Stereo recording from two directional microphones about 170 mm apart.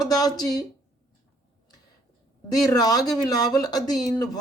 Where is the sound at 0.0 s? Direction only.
20° left (ahead or behind).